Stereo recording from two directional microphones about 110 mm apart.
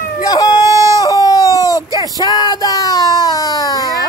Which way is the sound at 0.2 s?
35° left (ahead or behind).